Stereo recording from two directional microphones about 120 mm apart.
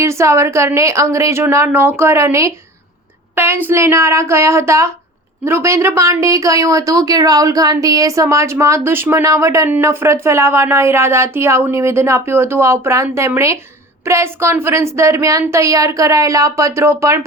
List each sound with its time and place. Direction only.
0.0 s speech: 25° right (ahead or behind)